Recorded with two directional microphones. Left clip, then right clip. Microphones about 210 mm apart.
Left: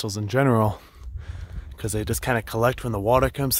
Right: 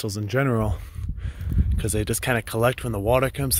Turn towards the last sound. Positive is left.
turn(degrees=15)  # may be behind; listen again after turning